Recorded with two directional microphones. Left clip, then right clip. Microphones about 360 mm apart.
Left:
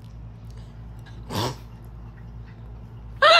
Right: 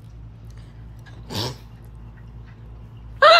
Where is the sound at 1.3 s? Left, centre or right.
Centre.